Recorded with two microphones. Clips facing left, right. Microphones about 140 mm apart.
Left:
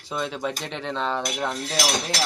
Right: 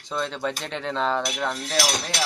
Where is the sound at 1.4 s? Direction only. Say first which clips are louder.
Right 1 dB; 10° left (ahead or behind).